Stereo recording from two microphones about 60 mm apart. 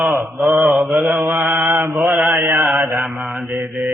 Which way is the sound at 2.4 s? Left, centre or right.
Right.